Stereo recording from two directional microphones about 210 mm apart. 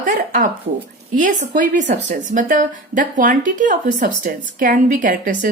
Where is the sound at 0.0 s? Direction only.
40° right (ahead or behind).